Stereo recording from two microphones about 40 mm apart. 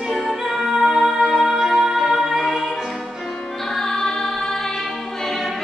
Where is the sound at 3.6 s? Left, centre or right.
Centre.